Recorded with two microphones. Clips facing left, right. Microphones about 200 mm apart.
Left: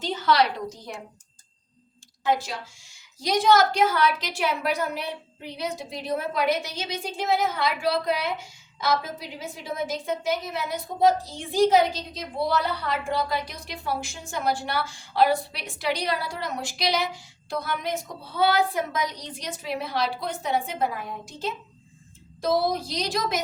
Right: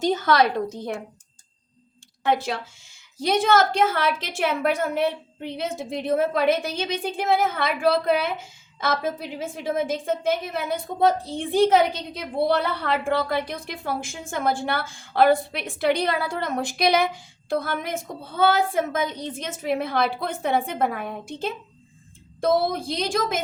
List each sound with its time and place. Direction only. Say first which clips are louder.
0.0 s a woman's voice: right 3 dB; 45° right (ahead or behind)
2.2 s a woman's voice: right 2 dB; 60° right (ahead or behind)